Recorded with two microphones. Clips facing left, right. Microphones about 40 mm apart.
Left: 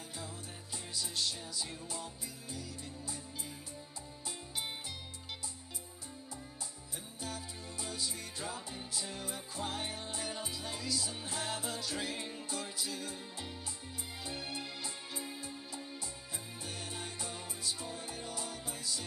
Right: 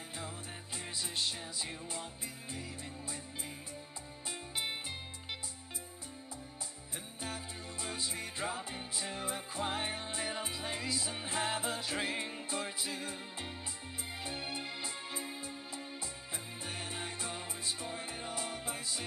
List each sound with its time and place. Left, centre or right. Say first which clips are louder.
0.9 s music: even; right
4.3 s music: right 3 dB; right
7.2 s music: right 1 dB; right